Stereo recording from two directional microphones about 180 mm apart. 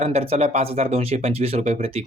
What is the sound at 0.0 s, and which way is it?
Speech, 35° right (ahead or behind).